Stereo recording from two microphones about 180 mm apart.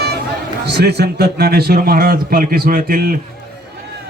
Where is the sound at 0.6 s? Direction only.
65° right (ahead or behind).